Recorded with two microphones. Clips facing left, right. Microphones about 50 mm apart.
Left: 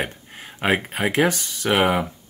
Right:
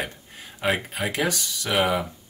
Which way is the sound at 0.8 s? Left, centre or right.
Left.